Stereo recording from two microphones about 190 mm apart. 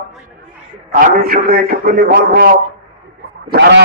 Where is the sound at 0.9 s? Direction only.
50° right (ahead or behind).